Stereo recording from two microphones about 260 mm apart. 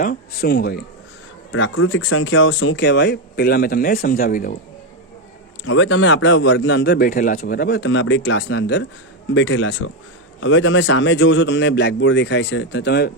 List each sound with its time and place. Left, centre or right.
0.0 s speech: left
1.5 s speech: left
5.6 s a man's voice: left